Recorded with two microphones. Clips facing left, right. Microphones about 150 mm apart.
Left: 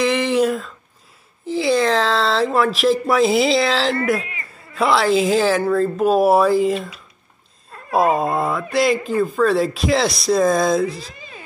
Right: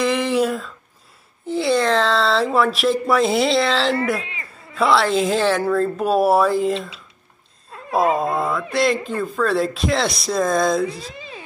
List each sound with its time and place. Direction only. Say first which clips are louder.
0.0 s a sound: left 2 dB; centre (ahead or behind)
1.4 s speech: left 1 dB; centre (ahead or behind)
7.9 s speech: left 1 dB; centre (ahead or behind)